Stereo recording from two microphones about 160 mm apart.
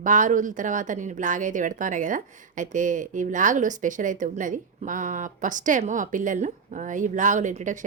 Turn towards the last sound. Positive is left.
turn(degrees=-50)  # may be behind; listen again after turning